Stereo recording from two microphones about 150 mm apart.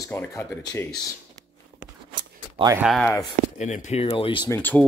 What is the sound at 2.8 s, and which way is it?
Speech, 5° right (ahead or behind).